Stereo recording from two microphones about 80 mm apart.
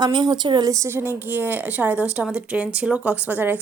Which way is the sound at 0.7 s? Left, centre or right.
Right.